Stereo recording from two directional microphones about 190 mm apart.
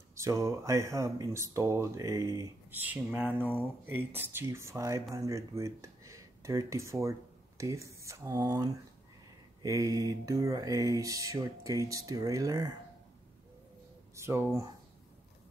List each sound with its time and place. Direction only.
0.1 s mantra: 15° right (ahead or behind)
3.3 s speech: 10° left (ahead or behind)
3.8 s mantra: 10° right (ahead or behind)
5.1 s speech: 15° right (ahead or behind)
9.6 s mantra: 20° right (ahead or behind)
14.1 s speech: 15° right (ahead or behind)